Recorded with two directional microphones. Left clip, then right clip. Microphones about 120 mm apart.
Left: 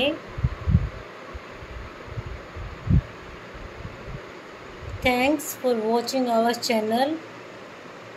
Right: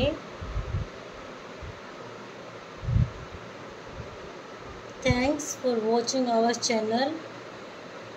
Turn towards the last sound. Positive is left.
turn(degrees=35)  # may be behind; listen again after turning